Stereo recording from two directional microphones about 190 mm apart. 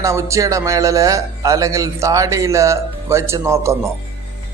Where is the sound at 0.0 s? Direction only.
15° right (ahead or behind).